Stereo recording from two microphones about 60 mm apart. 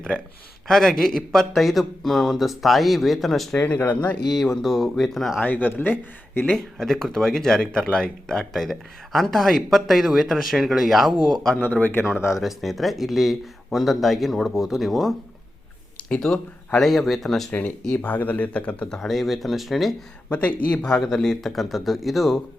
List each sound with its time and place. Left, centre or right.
0.7 s speech: centre
5.4 s speech: left
6.4 s speech: centre
11.5 s speech: left
12.3 s speech: centre
16.0 s speech: centre
17.9 s speech: left
18.9 s speech: centre
20.3 s speech: left
20.9 s speech: centre